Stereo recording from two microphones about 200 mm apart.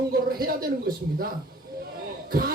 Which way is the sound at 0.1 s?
50° right (ahead or behind).